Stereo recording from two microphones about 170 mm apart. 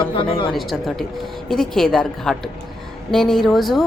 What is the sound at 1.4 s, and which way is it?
A woman's voice, centre (ahead or behind).